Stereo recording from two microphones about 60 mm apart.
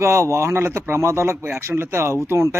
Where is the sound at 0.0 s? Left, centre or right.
Right.